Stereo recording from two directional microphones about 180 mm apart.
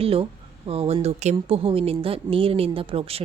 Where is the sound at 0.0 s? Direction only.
30° right (ahead or behind).